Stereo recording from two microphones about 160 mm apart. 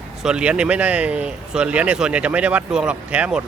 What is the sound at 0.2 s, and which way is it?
Speech, 5° right (ahead or behind).